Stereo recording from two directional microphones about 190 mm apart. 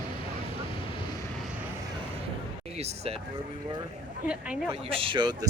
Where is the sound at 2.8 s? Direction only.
35° right (ahead or behind).